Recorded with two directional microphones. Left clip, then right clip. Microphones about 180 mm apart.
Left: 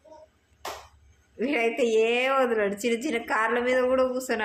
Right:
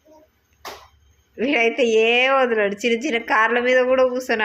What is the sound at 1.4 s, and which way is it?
Speech, 15° right (ahead or behind).